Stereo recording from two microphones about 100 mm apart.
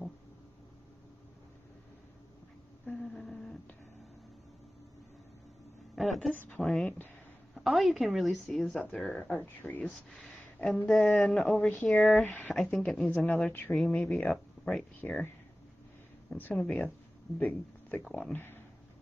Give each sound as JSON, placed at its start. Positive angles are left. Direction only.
{"t": 2.9, "sound": "a sound", "side_deg": 5}
{"t": 5.9, "sound": "a woman's voice", "side_deg": 0}
{"t": 7.5, "sound": "a woman's voice", "side_deg": 0}
{"t": 13.7, "sound": "a woman's voice", "side_deg": 10}
{"t": 16.3, "sound": "a woman's voice", "side_deg": 15}